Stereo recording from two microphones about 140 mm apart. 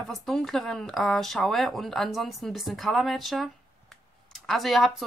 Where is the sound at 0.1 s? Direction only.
5° left (ahead or behind).